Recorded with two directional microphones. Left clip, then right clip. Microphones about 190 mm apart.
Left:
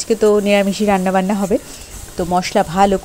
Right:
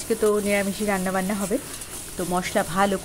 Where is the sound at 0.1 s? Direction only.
30° left (ahead or behind).